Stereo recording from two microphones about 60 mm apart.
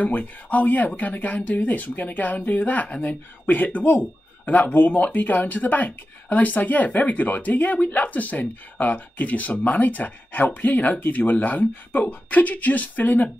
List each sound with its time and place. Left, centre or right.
0.0 s speech: left